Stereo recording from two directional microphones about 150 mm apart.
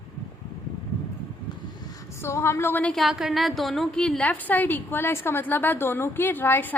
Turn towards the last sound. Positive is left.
turn(degrees=10)  # may be behind; listen again after turning